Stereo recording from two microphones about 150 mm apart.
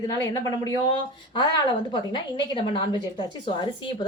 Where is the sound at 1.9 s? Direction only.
30° left (ahead or behind).